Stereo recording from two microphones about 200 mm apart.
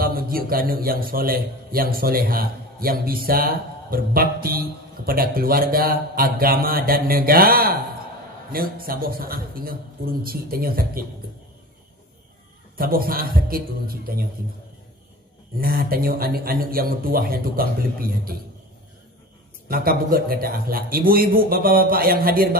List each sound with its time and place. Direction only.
0.0 s a man's voice: 45° right (ahead or behind)
12.7 s a man's voice: 50° right (ahead or behind)
15.6 s a man's voice: 50° right (ahead or behind)
19.7 s a man's voice: 45° right (ahead or behind)